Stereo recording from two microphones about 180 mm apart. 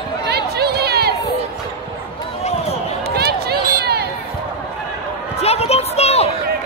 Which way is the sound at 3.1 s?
60° right (ahead or behind).